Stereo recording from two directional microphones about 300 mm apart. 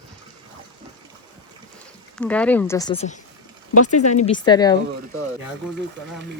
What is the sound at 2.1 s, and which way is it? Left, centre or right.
Speech, centre.